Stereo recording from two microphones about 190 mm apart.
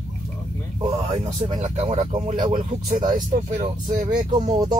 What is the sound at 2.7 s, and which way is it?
Speech, 35° right (ahead or behind).